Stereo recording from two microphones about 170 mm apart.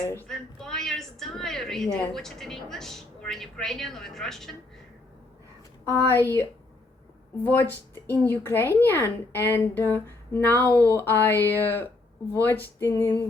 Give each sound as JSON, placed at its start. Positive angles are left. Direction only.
{"t": 0.0, "sound": "a woman's voice", "side_deg": 15}
{"t": 0.3, "sound": "a woman's voice", "side_deg": 5}
{"t": 6.1, "sound": "a woman's voice", "side_deg": 15}
{"t": 7.4, "sound": "a woman's voice", "side_deg": 10}